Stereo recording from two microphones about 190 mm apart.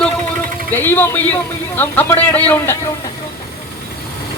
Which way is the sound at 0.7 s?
10° left (ahead or behind).